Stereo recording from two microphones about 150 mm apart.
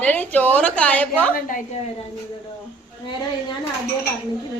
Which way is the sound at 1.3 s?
65° left (ahead or behind).